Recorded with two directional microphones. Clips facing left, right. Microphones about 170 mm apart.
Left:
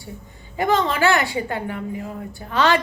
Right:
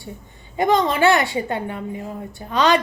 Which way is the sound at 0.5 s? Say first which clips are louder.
Right 2 dB; 20° right (ahead or behind).